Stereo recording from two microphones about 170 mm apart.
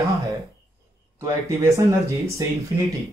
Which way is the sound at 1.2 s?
15° right (ahead or behind).